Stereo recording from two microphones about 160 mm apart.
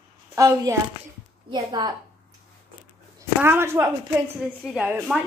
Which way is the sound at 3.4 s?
15° right (ahead or behind).